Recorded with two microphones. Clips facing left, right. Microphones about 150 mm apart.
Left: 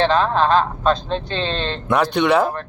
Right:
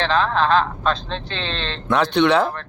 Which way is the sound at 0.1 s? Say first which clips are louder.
Left 2 dB; 40° left (ahead or behind).